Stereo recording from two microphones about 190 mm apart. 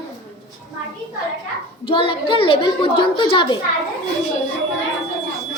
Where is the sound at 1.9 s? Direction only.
30° left (ahead or behind).